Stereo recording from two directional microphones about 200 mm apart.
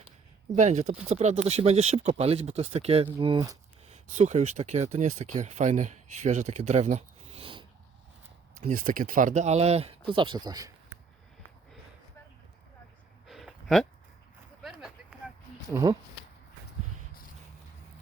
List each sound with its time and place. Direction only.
0.5 s speech: 35° right (ahead or behind); by 3.6 s 20° right (ahead or behind)
3.8 s speech: 35° right (ahead or behind)
8.6 s speech: 40° right (ahead or behind); by 10.7 s 20° right (ahead or behind)
13.2 s a sound: centre (ahead or behind)
15.7 s speech: 15° right (ahead or behind)